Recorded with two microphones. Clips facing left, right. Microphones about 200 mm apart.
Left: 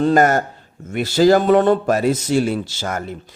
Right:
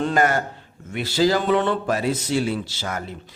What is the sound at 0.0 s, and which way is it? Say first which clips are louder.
A man's voice: left 6 dB; 40° left (ahead or behind).